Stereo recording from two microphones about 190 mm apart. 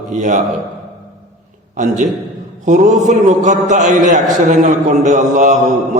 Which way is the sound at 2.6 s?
40° right (ahead or behind).